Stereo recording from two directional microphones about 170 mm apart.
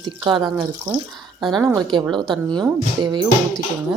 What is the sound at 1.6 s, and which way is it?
Speech, 20° right (ahead or behind).